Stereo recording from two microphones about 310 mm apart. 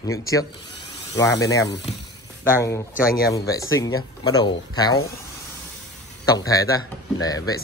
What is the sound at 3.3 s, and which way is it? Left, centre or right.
Speech, centre.